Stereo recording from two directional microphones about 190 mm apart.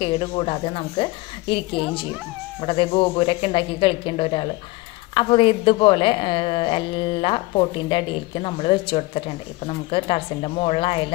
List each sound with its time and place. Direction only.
0.0 s a woman's voice: 30° left (ahead or behind)